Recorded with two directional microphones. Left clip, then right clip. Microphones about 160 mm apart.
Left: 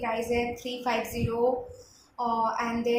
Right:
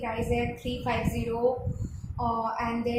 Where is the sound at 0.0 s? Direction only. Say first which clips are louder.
Left 2 dB; 30° left (ahead or behind).